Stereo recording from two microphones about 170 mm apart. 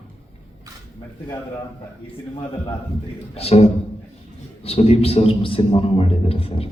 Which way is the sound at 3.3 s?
35° left (ahead or behind).